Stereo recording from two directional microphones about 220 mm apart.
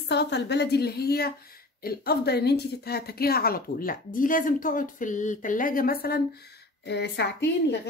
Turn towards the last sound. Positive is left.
turn(degrees=50)  # may be behind; listen again after turning